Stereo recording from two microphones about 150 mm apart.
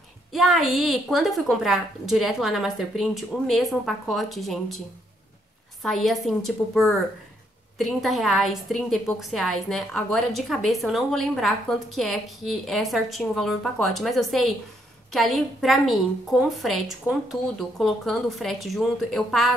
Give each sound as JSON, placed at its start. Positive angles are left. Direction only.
{"t": 0.3, "sound": "a woman's voice", "side_deg": 0}
{"t": 5.8, "sound": "a woman's voice", "side_deg": 0}